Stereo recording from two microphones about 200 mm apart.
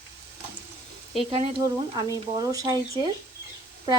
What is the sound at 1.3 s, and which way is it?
Speech, 25° right (ahead or behind).